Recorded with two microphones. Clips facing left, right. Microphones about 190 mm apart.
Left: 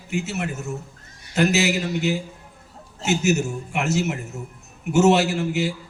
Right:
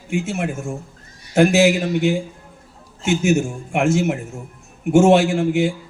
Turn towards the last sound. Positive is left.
turn(degrees=-55)  # may be behind; listen again after turning